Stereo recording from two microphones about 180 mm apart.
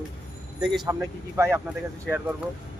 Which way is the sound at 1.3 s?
15° right (ahead or behind).